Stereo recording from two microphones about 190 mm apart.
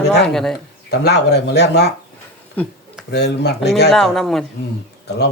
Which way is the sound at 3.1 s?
60° left (ahead or behind).